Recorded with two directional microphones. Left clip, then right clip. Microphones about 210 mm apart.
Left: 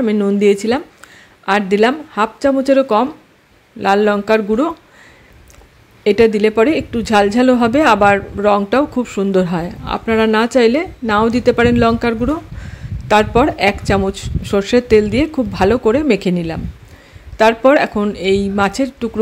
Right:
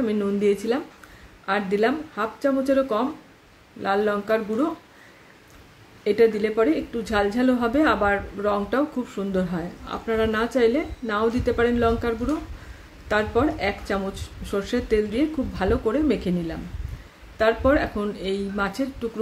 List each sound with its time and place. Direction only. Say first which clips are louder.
0.0 s speech: left 9 dB; 35° left (ahead or behind)
6.0 s speech: left 8 dB; 35° left (ahead or behind)